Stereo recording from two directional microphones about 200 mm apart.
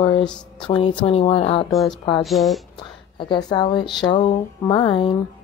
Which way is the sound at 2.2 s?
Centre (ahead or behind).